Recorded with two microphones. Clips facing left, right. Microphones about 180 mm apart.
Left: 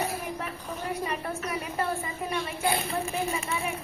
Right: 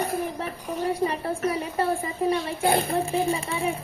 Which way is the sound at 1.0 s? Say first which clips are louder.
Right 7 dB; 30° right (ahead or behind).